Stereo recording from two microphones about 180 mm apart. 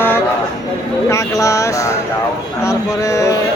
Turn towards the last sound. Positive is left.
turn(degrees=15)  # may be behind; listen again after turning